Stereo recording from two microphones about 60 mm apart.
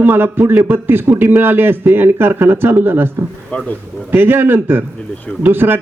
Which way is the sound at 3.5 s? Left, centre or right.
Centre.